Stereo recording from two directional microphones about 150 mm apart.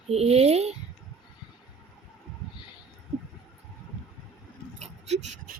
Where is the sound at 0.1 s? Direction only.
45° right (ahead or behind).